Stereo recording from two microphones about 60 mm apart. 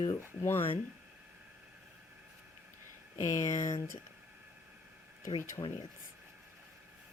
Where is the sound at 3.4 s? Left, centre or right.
Left.